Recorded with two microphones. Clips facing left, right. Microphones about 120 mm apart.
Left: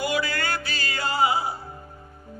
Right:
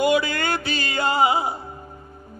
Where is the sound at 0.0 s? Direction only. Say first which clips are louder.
Right 6 dB; 20° right (ahead or behind).